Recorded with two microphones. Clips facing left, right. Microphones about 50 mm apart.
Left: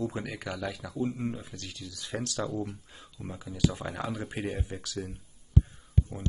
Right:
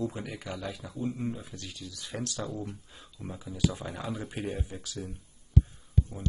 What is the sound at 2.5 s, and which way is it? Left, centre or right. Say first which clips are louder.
Speech: left 3 dB; centre.